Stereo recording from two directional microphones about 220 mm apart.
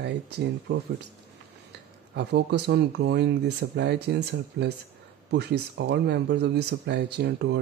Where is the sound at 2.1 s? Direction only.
50° right (ahead or behind).